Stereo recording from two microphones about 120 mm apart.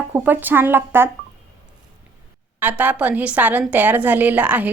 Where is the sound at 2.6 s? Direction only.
15° right (ahead or behind).